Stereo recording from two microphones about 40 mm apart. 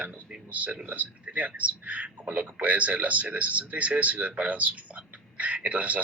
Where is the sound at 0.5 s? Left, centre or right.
Right.